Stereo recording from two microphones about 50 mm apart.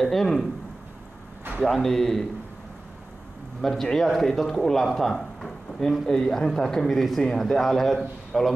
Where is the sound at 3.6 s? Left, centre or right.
Centre.